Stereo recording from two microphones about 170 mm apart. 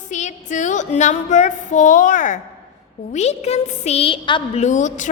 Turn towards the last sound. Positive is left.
turn(degrees=45)  # may be behind; listen again after turning